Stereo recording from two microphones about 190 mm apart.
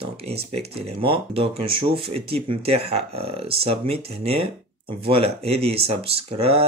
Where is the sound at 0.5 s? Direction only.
30° right (ahead or behind).